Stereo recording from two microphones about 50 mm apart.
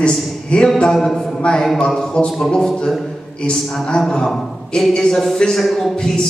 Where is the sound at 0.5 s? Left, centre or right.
Left.